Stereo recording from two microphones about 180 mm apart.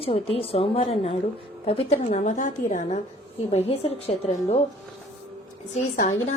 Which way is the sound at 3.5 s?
35° left (ahead or behind).